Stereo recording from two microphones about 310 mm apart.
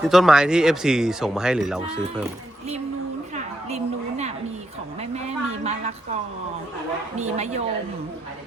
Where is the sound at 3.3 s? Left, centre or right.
Right.